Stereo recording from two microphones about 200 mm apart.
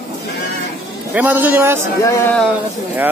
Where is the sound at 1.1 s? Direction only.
10° right (ahead or behind).